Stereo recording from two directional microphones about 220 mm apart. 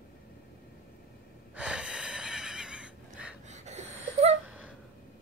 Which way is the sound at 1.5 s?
5° right (ahead or behind).